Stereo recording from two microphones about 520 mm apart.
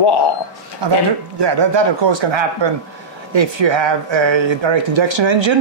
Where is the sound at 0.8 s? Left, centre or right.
Right.